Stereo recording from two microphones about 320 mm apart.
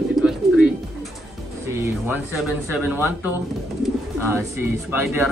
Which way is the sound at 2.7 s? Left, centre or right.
Centre.